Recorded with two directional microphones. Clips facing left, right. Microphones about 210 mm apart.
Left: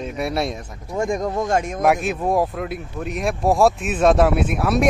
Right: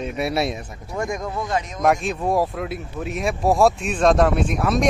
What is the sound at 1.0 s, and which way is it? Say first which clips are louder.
Speech: left 5 dB; 35° left (ahead or behind).